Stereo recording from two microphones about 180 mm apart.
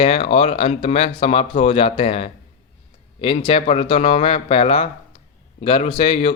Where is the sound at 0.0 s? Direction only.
35° left (ahead or behind).